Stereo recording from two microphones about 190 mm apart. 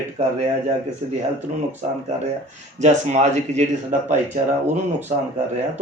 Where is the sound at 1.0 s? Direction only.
35° right (ahead or behind).